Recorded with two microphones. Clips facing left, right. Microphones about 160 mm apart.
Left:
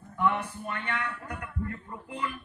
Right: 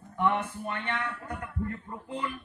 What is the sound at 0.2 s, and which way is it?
A man's voice, 30° right (ahead or behind).